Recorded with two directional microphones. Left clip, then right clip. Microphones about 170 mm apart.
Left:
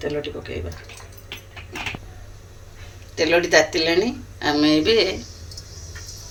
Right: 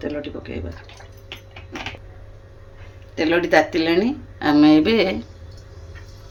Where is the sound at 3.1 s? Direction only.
60° right (ahead or behind).